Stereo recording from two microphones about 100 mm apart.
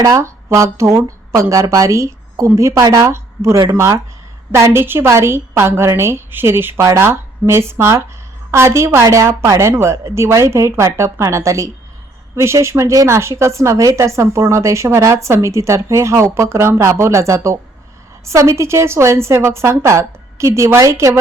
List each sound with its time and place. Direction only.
0.0 s a woman's voice: 30° right (ahead or behind)